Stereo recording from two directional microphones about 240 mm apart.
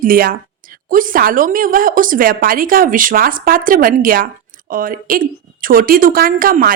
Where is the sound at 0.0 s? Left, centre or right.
Right.